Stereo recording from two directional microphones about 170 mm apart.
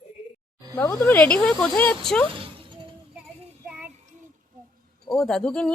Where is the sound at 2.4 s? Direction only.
30° right (ahead or behind).